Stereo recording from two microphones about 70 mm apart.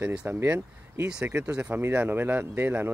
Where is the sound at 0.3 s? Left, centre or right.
Right.